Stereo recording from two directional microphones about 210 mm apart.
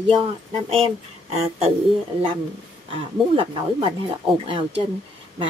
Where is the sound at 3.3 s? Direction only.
25° right (ahead or behind).